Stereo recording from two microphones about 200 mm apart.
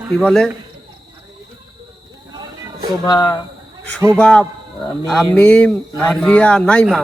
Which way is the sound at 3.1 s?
20° left (ahead or behind).